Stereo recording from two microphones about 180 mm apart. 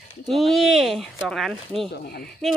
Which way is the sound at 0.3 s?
Centre (ahead or behind).